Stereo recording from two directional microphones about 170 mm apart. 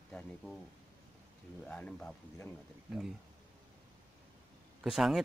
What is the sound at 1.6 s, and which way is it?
Speech, 5° left (ahead or behind).